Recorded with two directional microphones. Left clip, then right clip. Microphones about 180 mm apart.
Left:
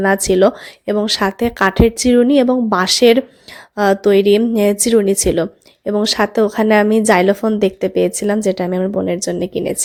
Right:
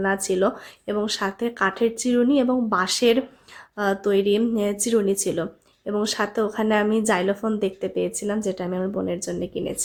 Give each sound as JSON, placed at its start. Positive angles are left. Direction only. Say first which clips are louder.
{"t": 0.0, "sound": "a woman's voice", "louder": "left 9 dB", "side_deg": 40}